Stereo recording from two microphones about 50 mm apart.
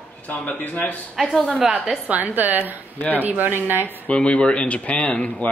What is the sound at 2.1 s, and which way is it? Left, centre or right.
A woman's voice, right.